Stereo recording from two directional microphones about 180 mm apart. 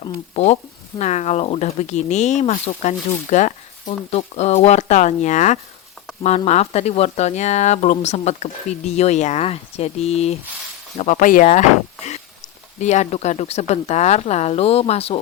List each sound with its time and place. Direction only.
0.0 s speech: 35° left (ahead or behind)
12.8 s speech: 40° left (ahead or behind)